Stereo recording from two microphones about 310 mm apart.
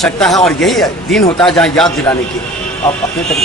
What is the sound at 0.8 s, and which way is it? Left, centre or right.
A man's voice, centre.